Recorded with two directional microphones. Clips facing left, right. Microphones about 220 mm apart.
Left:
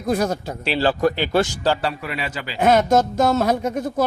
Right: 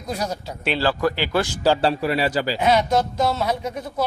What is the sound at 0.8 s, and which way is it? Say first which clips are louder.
Speech: left 3 dB; 20° left (ahead or behind).